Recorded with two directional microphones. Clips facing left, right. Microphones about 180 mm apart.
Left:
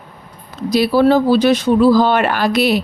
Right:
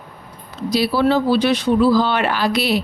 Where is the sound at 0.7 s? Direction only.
45° left (ahead or behind).